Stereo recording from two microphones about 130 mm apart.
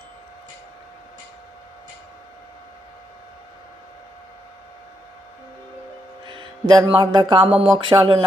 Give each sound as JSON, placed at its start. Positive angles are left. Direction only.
{"t": 6.2, "sound": "mantra", "side_deg": -40}
{"t": 7.5, "sound": "a sound", "side_deg": -45}
{"t": 7.9, "sound": "speech", "side_deg": -35}